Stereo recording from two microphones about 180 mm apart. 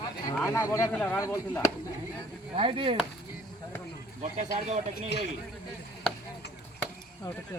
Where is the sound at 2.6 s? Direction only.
30° right (ahead or behind).